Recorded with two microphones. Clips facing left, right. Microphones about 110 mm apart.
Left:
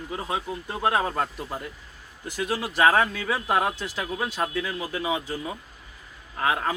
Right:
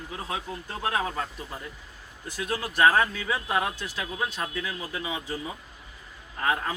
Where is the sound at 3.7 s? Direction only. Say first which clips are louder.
Left 3 dB; 15° left (ahead or behind).